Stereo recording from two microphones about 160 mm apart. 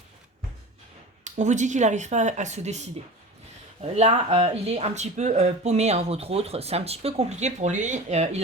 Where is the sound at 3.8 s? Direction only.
40° right (ahead or behind).